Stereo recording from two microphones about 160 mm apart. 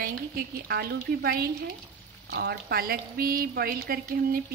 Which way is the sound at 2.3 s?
90° right.